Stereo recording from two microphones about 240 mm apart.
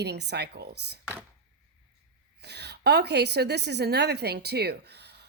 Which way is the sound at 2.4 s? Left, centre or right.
Right.